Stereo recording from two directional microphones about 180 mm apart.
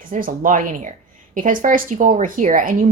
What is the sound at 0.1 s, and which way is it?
A woman's voice, 45° right (ahead or behind).